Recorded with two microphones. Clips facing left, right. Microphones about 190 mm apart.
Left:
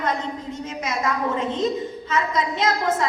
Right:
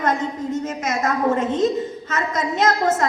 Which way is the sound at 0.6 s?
45° right (ahead or behind).